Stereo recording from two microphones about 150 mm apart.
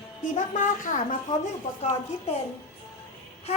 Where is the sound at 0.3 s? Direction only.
60° left (ahead or behind).